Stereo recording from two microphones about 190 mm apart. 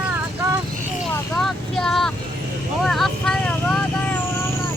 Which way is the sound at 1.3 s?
Centre (ahead or behind).